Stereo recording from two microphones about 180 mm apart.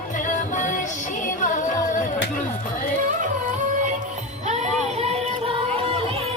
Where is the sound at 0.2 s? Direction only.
45° left (ahead or behind).